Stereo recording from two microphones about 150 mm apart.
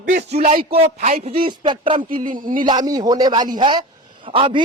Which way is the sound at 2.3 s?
60° right (ahead or behind).